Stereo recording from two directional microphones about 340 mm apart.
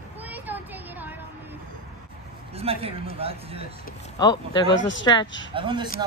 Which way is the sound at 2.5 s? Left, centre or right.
Centre.